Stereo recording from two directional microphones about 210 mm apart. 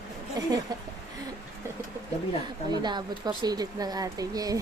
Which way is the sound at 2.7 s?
20° right (ahead or behind).